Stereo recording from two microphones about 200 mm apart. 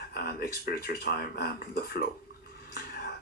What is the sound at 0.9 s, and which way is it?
Speech, 50° left (ahead or behind).